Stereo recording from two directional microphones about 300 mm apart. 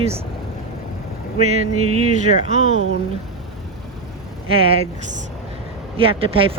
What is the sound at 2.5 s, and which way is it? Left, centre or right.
Speech, right.